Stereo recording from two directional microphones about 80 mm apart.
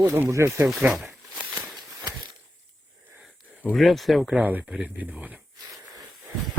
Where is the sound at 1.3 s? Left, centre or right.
Right.